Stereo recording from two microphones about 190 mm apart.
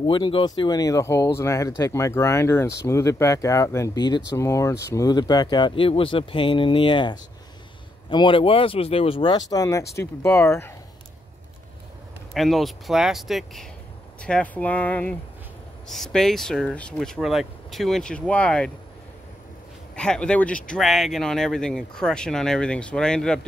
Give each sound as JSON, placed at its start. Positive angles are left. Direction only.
{"t": 0.0, "sound": "speech", "side_deg": 25}
{"t": 12.4, "sound": "speech", "side_deg": 0}
{"t": 20.0, "sound": "speech", "side_deg": 5}